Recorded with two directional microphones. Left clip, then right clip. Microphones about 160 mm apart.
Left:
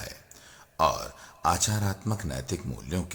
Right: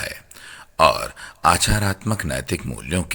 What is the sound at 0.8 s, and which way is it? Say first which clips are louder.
Speech: right 9 dB; 25° right (ahead or behind).